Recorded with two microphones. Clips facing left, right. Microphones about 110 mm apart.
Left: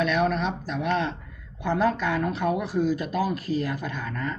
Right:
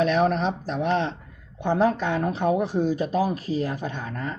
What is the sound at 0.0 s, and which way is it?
Speech, 35° right (ahead or behind).